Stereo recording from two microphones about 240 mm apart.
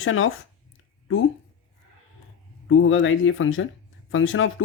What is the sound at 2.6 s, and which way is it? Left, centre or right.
Speech, left.